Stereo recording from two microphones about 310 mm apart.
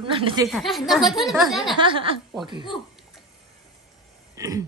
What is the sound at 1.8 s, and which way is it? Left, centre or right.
Speech, centre.